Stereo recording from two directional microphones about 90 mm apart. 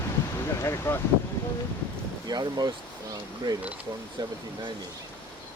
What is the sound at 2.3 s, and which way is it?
Speech, 50° right (ahead or behind).